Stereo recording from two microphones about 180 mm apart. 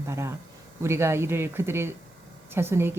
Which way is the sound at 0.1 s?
15° right (ahead or behind).